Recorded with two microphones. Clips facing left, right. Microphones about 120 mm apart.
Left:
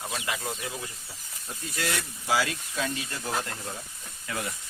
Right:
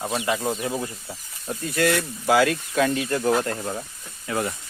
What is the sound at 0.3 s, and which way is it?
Speech, 35° right (ahead or behind).